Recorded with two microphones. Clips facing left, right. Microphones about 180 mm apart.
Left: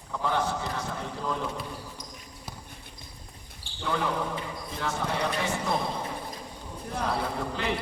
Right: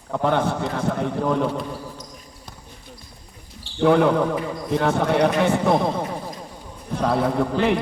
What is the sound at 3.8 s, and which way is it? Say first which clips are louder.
A man's voice: right 13 dB; 65° right (ahead or behind).